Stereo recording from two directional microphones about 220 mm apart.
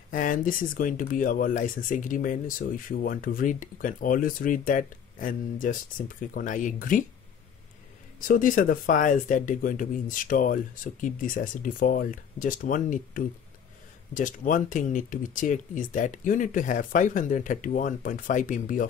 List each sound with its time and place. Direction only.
0.1 s speech: 40° left (ahead or behind)
8.2 s speech: 35° left (ahead or behind)